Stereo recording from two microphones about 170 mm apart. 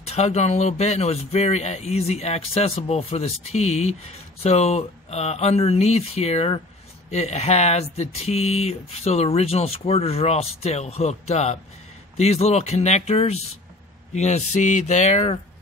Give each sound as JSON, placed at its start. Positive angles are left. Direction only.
{"t": 0.0, "sound": "speech", "side_deg": 40}